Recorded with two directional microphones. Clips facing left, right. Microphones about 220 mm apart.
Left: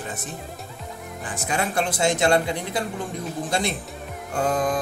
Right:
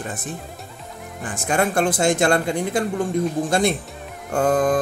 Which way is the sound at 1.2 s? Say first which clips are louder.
Right 5 dB; 50° right (ahead or behind).